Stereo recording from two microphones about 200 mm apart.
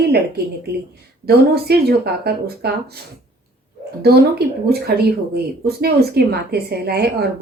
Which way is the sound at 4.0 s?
55° right (ahead or behind).